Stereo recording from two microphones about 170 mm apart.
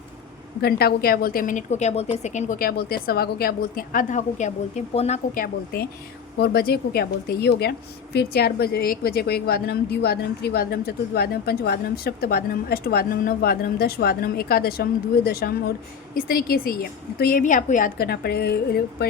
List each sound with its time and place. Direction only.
0.6 s a woman's voice: 65° left (ahead or behind); by 2.6 s 45° left (ahead or behind)
2.6 s a woman's voice: 60° left (ahead or behind); by 5.4 s 40° left (ahead or behind)
5.4 s a woman's voice: 60° left (ahead or behind)